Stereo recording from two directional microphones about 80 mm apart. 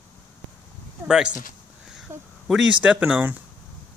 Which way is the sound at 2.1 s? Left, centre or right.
Right.